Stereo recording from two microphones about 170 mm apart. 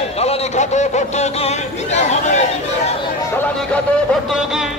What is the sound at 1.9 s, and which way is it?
Chatter, 45° left (ahead or behind).